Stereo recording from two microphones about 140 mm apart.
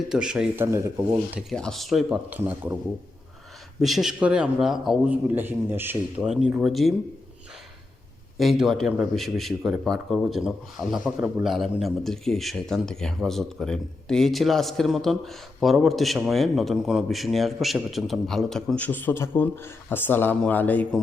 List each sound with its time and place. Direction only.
0.1 s speech: 5° right (ahead or behind)
0.6 s speech: 20° right (ahead or behind)
1.3 s speech: centre (ahead or behind)
3.8 s a man's voice: centre (ahead or behind)
8.4 s a man's voice: centre (ahead or behind)